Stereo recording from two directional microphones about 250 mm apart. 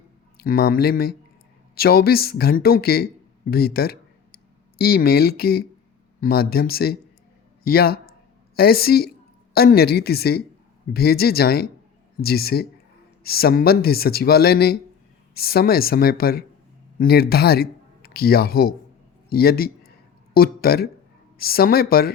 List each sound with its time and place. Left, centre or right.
0.3 s a man's voice: left